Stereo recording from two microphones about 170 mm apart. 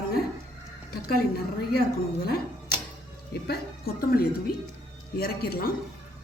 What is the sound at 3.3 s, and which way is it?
Speech, 70° left (ahead or behind).